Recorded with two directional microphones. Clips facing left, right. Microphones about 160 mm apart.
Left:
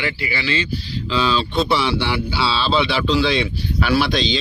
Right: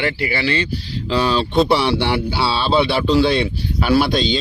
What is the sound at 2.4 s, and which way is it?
Speech, 55° right (ahead or behind).